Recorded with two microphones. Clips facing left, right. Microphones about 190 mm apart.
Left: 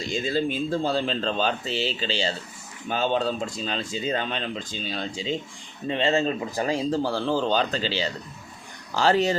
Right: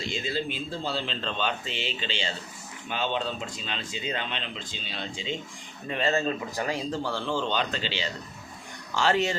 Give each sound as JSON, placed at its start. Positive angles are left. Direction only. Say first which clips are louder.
{"t": 0.1, "sound": "speech", "louder": "left 7 dB", "side_deg": 45}